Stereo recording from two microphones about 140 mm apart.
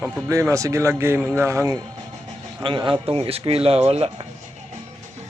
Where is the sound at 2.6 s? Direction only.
35° right (ahead or behind).